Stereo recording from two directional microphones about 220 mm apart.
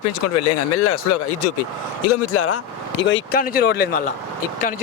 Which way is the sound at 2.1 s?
85° left.